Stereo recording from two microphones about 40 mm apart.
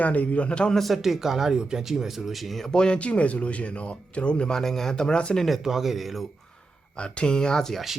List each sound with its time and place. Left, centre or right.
0.0 s speech: left
1.0 s speech: centre
2.6 s speech: left
4.4 s speech: centre
5.6 s speech: centre
6.9 s speech: left